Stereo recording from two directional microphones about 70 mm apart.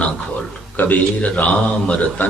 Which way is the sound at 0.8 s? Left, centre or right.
Left.